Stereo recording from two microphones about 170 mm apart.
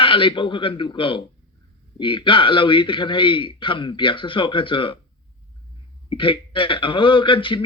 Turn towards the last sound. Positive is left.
turn(degrees=30)  # may be behind; listen again after turning